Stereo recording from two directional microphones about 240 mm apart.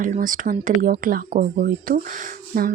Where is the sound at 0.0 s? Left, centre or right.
Right.